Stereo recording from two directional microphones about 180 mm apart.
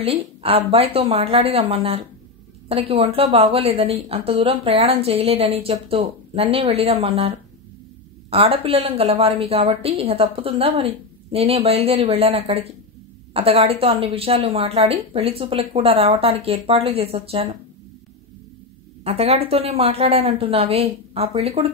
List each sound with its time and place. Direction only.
0.0 s a woman's voice: 30° right (ahead or behind)
19.0 s a woman's voice: 35° right (ahead or behind)